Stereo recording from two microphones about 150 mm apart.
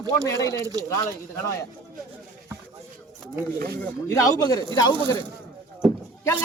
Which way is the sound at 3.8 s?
20° left (ahead or behind).